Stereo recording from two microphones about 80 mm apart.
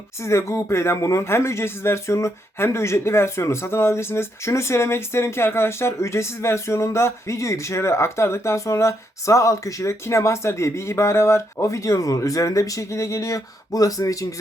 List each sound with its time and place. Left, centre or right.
0.2 s speech: left